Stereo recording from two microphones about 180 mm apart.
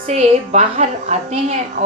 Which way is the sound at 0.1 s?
40° right (ahead or behind).